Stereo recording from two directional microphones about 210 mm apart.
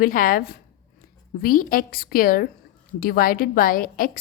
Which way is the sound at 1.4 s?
40° left (ahead or behind).